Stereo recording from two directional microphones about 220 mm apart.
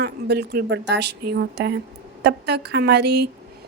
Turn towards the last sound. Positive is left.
turn(degrees=-50)  # may be behind; listen again after turning